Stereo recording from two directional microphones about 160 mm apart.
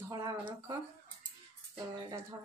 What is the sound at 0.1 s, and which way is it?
Speech, 20° right (ahead or behind).